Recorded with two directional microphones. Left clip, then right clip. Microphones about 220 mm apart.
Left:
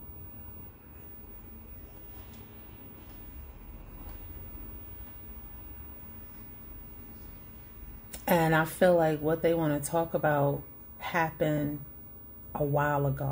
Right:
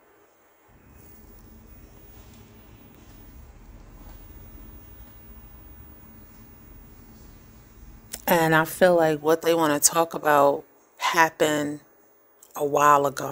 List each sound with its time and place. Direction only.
8.1 s speech: 40° right (ahead or behind)
12.7 s speech: 40° right (ahead or behind)